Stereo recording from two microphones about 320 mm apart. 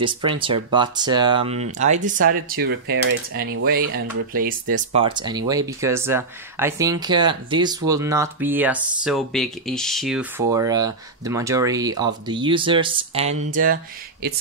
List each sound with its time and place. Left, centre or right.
0.0 s speech: centre